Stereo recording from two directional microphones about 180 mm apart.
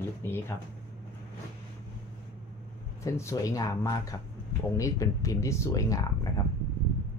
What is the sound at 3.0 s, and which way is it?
Speech, 15° left (ahead or behind).